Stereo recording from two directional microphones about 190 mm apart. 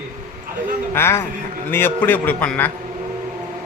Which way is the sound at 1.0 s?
15° left (ahead or behind).